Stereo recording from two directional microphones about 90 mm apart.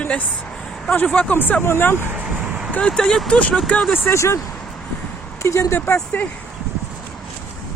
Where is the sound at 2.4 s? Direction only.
10° right (ahead or behind).